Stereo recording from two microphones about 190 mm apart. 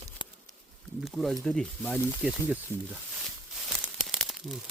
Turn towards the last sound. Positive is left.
turn(degrees=0)  # may be behind; listen again after turning